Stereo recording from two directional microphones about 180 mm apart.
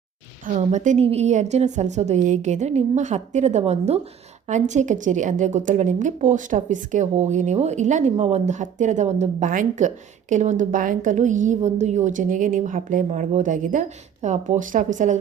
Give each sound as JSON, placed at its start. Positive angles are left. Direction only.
{"t": 0.4, "sound": "a woman's voice", "side_deg": -40}